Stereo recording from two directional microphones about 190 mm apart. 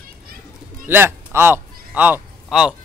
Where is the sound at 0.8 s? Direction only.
10° right (ahead or behind).